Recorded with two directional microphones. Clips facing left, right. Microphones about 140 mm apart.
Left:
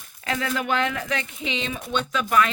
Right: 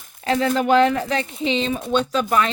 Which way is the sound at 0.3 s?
35° right (ahead or behind).